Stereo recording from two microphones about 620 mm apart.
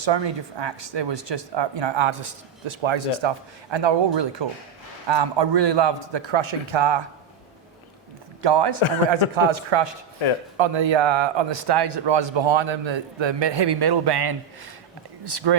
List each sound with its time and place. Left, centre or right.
0.0 s speech: right
8.4 s a man's voice: right